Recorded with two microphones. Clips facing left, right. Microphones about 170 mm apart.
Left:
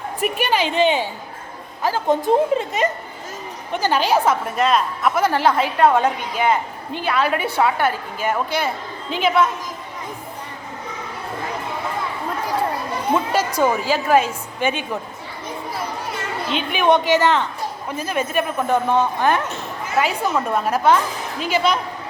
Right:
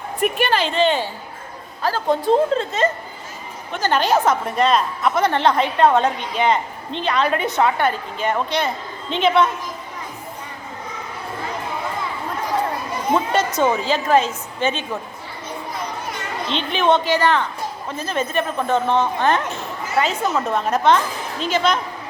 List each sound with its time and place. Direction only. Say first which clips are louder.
0.2 s a woman's voice: right 1 dB; 10° left (ahead or behind)
13.6 s a woman's voice: left 2 dB; 10° left (ahead or behind)
16.5 s a woman's voice: left 1 dB; 10° left (ahead or behind)